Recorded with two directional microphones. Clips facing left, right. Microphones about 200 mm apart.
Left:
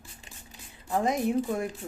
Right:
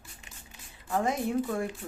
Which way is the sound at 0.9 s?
20° left (ahead or behind).